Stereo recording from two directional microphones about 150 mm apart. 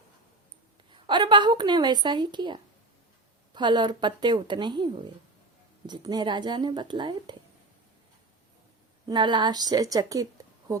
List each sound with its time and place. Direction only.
0.9 s a woman's voice: 30° right (ahead or behind)
9.0 s a woman's voice: 30° right (ahead or behind)